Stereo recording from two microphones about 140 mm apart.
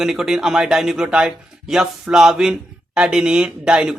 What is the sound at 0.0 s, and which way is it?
A man's voice, 5° right (ahead or behind).